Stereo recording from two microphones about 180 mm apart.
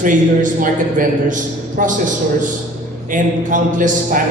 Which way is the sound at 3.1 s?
45° right (ahead or behind).